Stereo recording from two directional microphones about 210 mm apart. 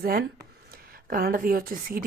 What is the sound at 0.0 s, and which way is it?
Speech, 45° right (ahead or behind).